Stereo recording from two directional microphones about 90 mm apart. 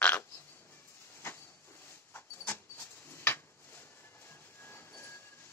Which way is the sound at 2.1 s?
20° left (ahead or behind).